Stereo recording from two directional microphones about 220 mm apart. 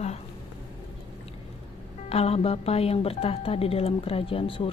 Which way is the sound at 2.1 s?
25° left (ahead or behind).